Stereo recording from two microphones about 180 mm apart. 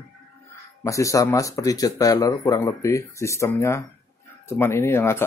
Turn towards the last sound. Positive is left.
turn(degrees=15)  # may be behind; listen again after turning